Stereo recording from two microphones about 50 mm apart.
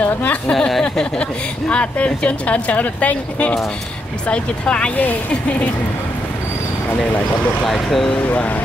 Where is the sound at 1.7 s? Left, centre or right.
Left.